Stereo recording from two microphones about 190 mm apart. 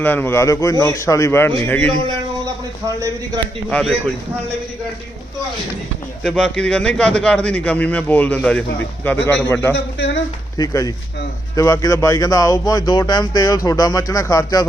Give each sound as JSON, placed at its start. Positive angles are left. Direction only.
{"t": 0.0, "sound": "a man's voice", "side_deg": 10}
{"t": 2.8, "sound": "a man's voice", "side_deg": -20}
{"t": 3.7, "sound": "speech", "side_deg": 5}
{"t": 6.2, "sound": "a man's voice", "side_deg": 0}
{"t": 9.7, "sound": "speech", "side_deg": 65}
{"t": 10.6, "sound": "a man's voice", "side_deg": 20}